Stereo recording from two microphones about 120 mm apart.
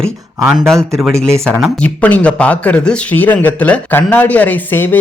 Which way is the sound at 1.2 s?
5° left (ahead or behind).